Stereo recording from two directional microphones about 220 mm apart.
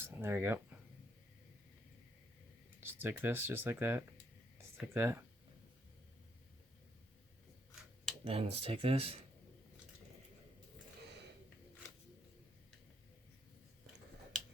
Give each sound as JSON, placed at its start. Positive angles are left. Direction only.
{"t": 0.0, "sound": "speech", "side_deg": -10}
{"t": 2.8, "sound": "speech", "side_deg": -10}
{"t": 4.5, "sound": "a sound", "side_deg": -10}
{"t": 8.2, "sound": "speech", "side_deg": -25}